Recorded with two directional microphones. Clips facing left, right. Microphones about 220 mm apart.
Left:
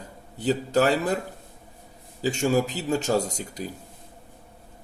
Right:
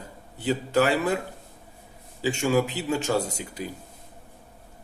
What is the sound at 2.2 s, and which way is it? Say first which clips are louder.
Speech: even; 40° left (ahead or behind).